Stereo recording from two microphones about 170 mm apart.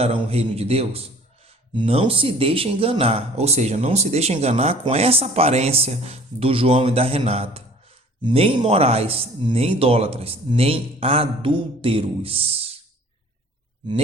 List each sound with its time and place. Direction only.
0.0 s speech: 35° right (ahead or behind)